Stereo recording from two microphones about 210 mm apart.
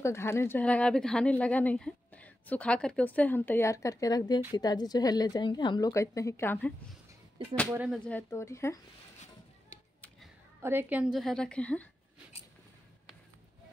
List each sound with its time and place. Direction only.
0.0 s a woman's voice: 10° left (ahead or behind)
7.7 s speech: 5° right (ahead or behind)
8.0 s speech: 10° left (ahead or behind)
10.6 s a woman's voice: 10° right (ahead or behind); by 11.9 s 5° left (ahead or behind)